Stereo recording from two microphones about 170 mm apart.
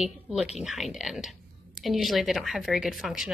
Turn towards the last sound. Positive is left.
turn(degrees=0)  # may be behind; listen again after turning